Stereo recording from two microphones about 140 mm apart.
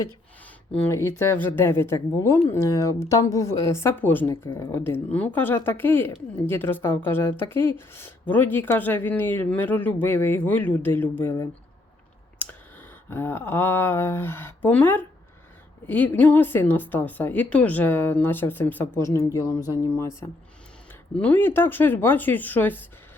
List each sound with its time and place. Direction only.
0.8 s speech: 20° left (ahead or behind)
12.4 s a sound: 15° left (ahead or behind)
13.1 s speech: 15° left (ahead or behind)